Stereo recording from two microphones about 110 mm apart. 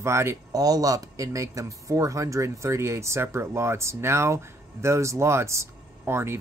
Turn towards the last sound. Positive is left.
turn(degrees=-25)  # may be behind; listen again after turning